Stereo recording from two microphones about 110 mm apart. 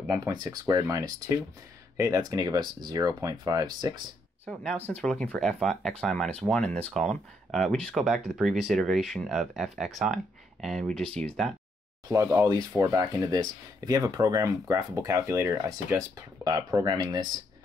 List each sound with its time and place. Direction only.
0.1 s speech: 35° right (ahead or behind)
4.5 s speech: 10° left (ahead or behind)
12.1 s speech: 25° right (ahead or behind)
16.4 s speech: 35° right (ahead or behind)